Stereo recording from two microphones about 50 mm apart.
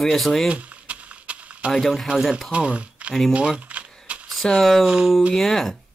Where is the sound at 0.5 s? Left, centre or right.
Right.